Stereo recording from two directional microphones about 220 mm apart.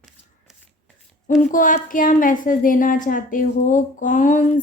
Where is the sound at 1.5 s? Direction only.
35° left (ahead or behind).